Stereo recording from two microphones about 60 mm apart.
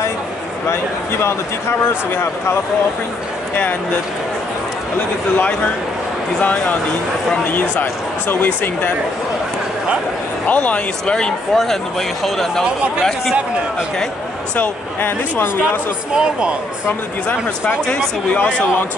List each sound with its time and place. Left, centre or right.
0.7 s speech: left
6.4 s speech: left
10.4 s speech: left
11.5 s speech: centre
13.0 s speech: centre
14.6 s speech: left
16.2 s speech: centre
18.3 s speech: left